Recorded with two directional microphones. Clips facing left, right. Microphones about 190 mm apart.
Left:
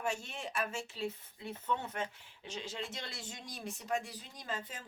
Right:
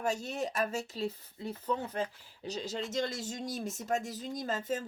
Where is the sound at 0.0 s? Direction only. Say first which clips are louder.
Right 6 dB; 40° right (ahead or behind).